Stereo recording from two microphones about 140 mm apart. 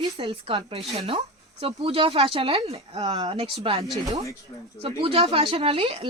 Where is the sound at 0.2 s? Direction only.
40° right (ahead or behind).